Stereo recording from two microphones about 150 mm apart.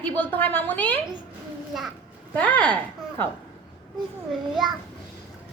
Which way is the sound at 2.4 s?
10° left (ahead or behind).